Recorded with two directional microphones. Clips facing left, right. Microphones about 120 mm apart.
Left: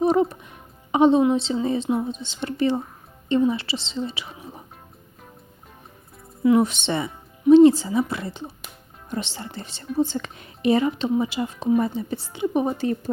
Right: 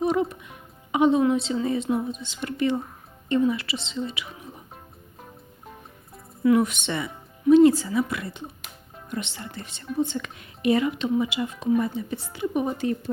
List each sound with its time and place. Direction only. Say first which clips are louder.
0.0 s music: left 4 dB; 35° left (ahead or behind)
1.3 s speech: left 2 dB; 30° left (ahead or behind)
6.4 s speech: left 2 dB; 25° left (ahead or behind)